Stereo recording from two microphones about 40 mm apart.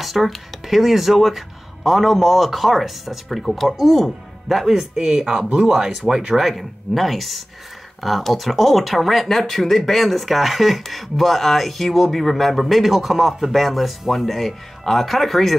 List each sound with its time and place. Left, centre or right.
0.0 s speech: centre
4.6 s speech: centre
4.9 s speech: right
5.7 s speech: centre